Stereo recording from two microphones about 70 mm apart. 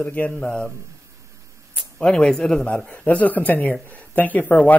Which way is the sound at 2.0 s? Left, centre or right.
Centre.